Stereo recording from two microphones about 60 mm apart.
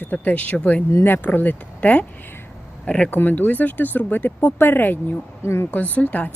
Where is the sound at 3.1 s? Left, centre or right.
Left.